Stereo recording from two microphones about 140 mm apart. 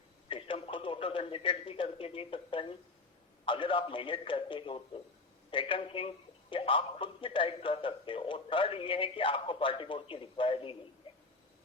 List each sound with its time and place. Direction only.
0.3 s radio: 40° left (ahead or behind)
3.4 s a man's voice: 35° left (ahead or behind)
11.1 s a sound: 40° left (ahead or behind)